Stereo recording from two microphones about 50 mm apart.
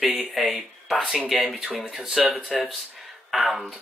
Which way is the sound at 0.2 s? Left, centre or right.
Centre.